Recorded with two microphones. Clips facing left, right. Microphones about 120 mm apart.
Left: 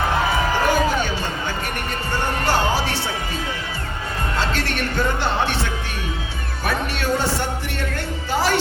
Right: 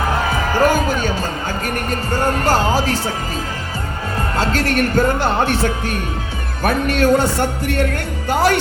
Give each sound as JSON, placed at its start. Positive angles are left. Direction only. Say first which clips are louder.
{"t": 0.6, "sound": "music", "louder": "right 6 dB", "side_deg": -45}
{"t": 4.4, "sound": "speech", "louder": "right 7 dB", "side_deg": -45}
{"t": 8.3, "sound": "jingle bell", "louder": "right 6 dB", "side_deg": -55}